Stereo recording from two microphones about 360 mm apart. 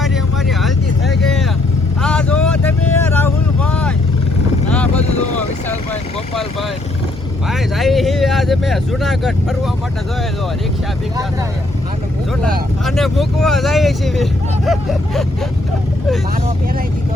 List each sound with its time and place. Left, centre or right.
0.0 s vehicle: centre
5.6 s vehicle: centre
12.8 s speech: centre